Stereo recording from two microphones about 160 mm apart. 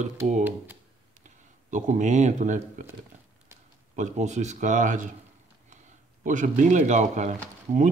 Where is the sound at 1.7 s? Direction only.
50° right (ahead or behind).